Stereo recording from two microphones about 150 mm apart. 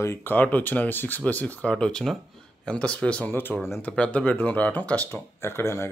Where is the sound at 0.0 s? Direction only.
15° left (ahead or behind).